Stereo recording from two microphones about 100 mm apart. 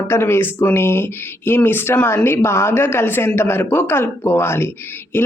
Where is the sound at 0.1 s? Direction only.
25° left (ahead or behind).